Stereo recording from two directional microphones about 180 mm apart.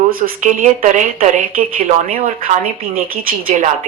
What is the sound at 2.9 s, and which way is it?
Speech, 55° right (ahead or behind).